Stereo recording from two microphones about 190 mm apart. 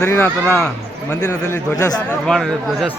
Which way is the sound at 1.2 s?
20° left (ahead or behind).